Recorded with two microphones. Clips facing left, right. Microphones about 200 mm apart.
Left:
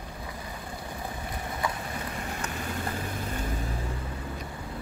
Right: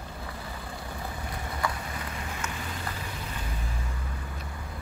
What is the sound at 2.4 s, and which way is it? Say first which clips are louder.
Vehicle: left 1 dB; 35° left (ahead or behind).